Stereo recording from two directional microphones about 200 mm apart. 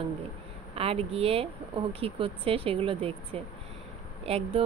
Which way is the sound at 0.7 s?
30° right (ahead or behind).